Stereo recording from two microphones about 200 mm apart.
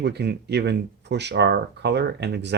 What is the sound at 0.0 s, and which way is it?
Speech, 55° right (ahead or behind).